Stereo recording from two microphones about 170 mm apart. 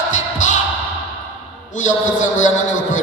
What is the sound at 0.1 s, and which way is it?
Music, 45° left (ahead or behind).